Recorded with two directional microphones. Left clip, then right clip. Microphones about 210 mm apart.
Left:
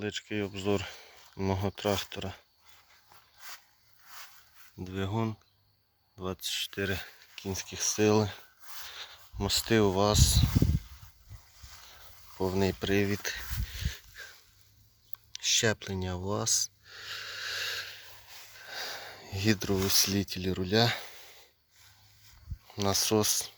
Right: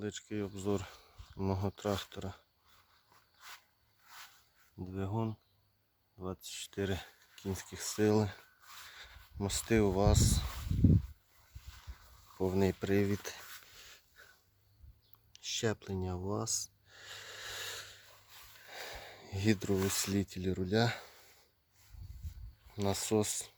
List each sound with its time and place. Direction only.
0.0 s speech: centre (ahead or behind)
3.4 s a sound: 50° left (ahead or behind)
4.8 s speech: centre (ahead or behind)
6.7 s speech: 15° right (ahead or behind)
8.6 s a sound: 50° left (ahead or behind)
8.9 s speech: 5° right (ahead or behind)
12.4 s speech: 10° right (ahead or behind)
13.7 s dog: 10° right (ahead or behind)
15.3 s a sound: centre (ahead or behind)
18.7 s sniff: 15° right (ahead or behind)
20.0 s speech: 5° right (ahead or behind)
22.7 s speech: 5° right (ahead or behind)